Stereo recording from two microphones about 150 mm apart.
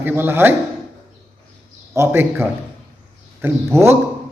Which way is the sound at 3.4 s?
15° right (ahead or behind).